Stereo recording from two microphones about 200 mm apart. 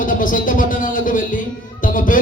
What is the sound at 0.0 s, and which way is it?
Music, 45° left (ahead or behind).